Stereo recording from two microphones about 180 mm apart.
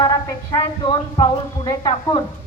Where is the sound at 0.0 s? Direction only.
20° left (ahead or behind).